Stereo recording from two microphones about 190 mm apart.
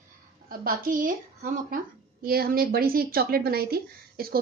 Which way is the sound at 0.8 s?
45° right (ahead or behind).